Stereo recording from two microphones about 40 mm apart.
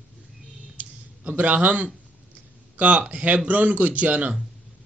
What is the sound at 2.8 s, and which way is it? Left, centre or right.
A man's voice, right.